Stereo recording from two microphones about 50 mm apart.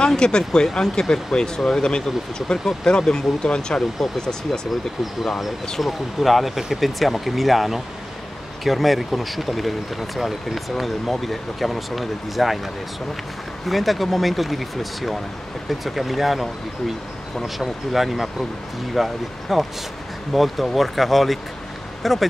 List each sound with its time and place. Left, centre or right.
0.0 s speech: centre
5.0 s speech: centre
13.7 s speech: centre